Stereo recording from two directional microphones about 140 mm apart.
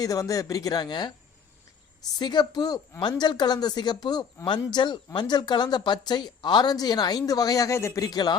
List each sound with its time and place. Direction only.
0.0 s speech: 25° left (ahead or behind)
2.1 s speech: 30° left (ahead or behind)